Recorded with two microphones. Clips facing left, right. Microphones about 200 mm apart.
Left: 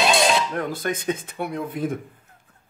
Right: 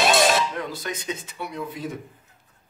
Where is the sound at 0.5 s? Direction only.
55° left (ahead or behind).